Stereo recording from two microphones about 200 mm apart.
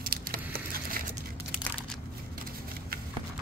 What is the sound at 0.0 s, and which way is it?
Patter, 50° right (ahead or behind).